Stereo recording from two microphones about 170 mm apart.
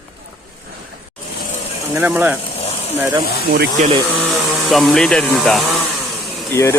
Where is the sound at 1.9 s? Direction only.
10° right (ahead or behind).